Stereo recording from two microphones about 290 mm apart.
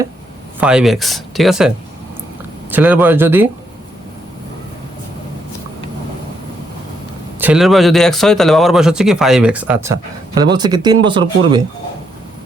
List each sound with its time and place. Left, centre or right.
0.6 s a man's voice: centre
7.3 s a man's voice: centre